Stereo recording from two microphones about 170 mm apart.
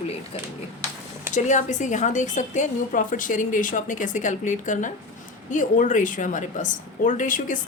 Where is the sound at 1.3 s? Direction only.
45° left (ahead or behind).